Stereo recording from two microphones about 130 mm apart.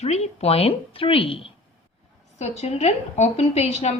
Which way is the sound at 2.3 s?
60° left (ahead or behind).